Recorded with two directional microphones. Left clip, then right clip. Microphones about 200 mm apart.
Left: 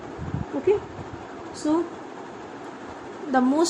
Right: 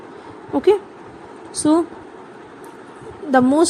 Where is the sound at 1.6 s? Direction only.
55° right (ahead or behind).